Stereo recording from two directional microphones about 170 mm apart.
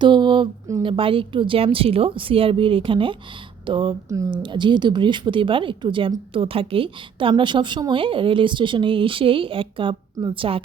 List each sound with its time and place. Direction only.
0.0 s a woman's voice: 25° right (ahead or behind)